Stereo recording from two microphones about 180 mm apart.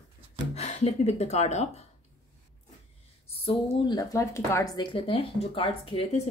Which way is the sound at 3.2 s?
30° left (ahead or behind).